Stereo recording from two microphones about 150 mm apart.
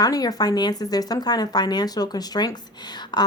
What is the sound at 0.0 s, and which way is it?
A woman's voice, 25° left (ahead or behind).